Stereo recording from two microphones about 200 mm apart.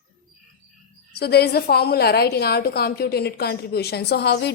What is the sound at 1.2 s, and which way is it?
A woman's voice, 55° left (ahead or behind).